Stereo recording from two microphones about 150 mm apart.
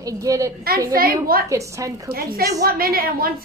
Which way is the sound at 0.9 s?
80° right.